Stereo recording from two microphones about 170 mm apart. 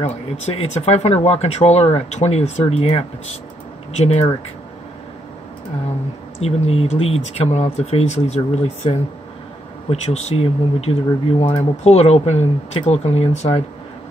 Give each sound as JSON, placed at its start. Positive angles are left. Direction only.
{"t": 0.0, "sound": "speech", "side_deg": 40}
{"t": 6.4, "sound": "speech", "side_deg": 35}